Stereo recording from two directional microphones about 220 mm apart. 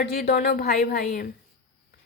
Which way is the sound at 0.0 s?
45° left (ahead or behind).